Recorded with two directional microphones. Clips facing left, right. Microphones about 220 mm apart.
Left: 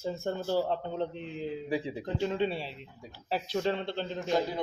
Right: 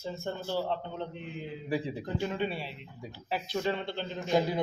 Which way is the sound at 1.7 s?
20° left (ahead or behind).